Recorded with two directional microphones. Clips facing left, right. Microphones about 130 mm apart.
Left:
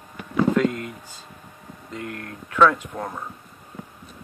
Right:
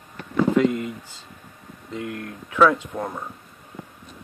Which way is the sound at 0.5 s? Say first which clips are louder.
Right 2 dB; 20° right (ahead or behind).